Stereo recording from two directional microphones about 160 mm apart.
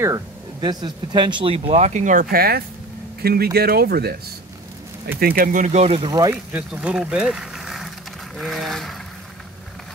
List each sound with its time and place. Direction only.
0.0 s speech: 25° right (ahead or behind); by 4.2 s 75° right (ahead or behind)
5.2 s speech: 65° right (ahead or behind); by 5.9 s 45° right (ahead or behind)
5.9 s speech: 25° right (ahead or behind)
6.3 s speech: 5° right (ahead or behind)